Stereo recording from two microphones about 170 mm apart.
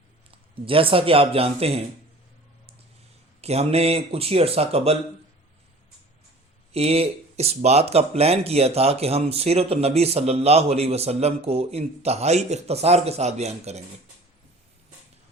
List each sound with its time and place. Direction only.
0.3 s a man's voice: 30° right (ahead or behind)
3.4 s speech: 40° right (ahead or behind)
6.7 s speech: 35° right (ahead or behind)